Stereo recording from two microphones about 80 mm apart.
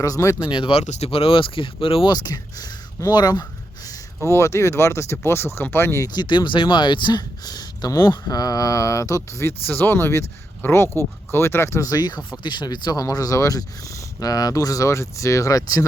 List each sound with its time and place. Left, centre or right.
0.0 s speech: left
0.4 s speech: left
2.1 s speech: left
3.8 s speech: left
6.1 s speech: left
11.9 s speech: left
12.4 s speech: left